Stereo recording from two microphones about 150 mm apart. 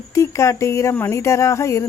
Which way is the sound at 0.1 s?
20° left (ahead or behind).